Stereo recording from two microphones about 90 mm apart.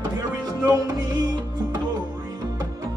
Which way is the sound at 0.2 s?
45° right (ahead or behind).